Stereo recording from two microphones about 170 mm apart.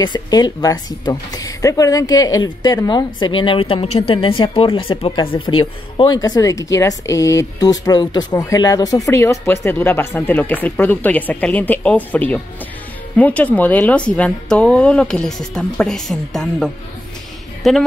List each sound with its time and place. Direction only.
0.0 s speech: 25° left (ahead or behind); by 17.8 s centre (ahead or behind)